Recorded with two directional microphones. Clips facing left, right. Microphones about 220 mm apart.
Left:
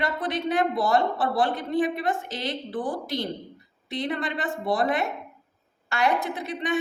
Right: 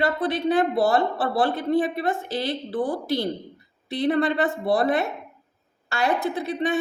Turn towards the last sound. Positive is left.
turn(degrees=-35)  # may be behind; listen again after turning